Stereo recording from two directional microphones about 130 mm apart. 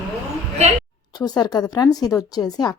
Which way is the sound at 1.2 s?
30° left (ahead or behind).